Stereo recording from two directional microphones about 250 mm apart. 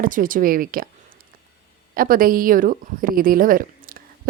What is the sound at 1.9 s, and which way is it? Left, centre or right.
A woman's voice, right.